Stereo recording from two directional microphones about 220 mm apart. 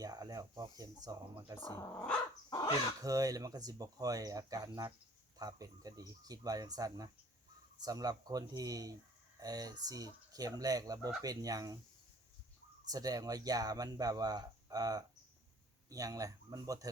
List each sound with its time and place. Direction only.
0.0 s speech: 15° right (ahead or behind)
1.7 s speech: 10° left (ahead or behind)
2.5 s speech: 15° left (ahead or behind)
3.0 s speech: 15° right (ahead or behind)
12.9 s speech: 15° right (ahead or behind)